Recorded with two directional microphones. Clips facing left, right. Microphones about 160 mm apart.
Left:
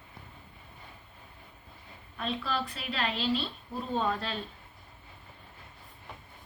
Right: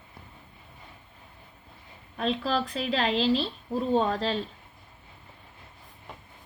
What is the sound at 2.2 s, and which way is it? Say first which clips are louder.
Speech: right 6 dB; 40° right (ahead or behind).